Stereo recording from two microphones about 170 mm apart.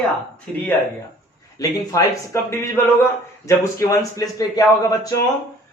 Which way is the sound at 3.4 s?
20° left (ahead or behind).